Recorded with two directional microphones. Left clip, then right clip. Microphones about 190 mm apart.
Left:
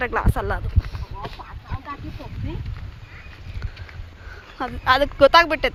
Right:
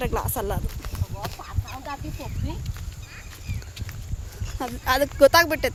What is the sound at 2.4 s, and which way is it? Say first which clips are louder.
Speech: left 2 dB; 75° right (ahead or behind).